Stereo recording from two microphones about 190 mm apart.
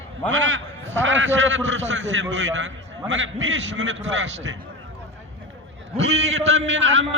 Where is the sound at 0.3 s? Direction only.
75° right (ahead or behind).